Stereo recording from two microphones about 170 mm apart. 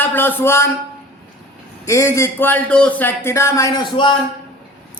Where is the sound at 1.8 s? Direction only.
15° left (ahead or behind).